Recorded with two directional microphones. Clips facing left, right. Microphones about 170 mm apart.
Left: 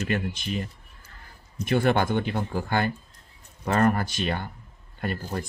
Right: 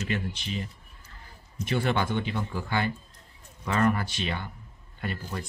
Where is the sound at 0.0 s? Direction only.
50° left (ahead or behind).